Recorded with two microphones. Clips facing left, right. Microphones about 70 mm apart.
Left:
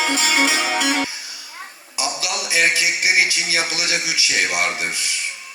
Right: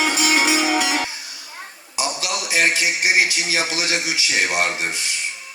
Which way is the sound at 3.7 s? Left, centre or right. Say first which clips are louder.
Right 1 dB; right.